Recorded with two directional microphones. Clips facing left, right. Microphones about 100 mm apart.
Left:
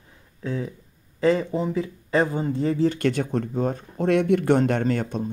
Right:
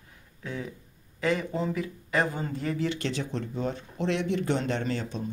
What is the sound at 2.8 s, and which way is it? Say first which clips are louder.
Speech: left 8 dB; 50° left (ahead or behind).